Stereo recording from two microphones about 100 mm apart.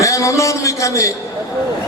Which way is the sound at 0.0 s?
30° left (ahead or behind).